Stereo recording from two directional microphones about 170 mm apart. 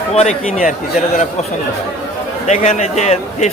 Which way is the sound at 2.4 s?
40° left (ahead or behind).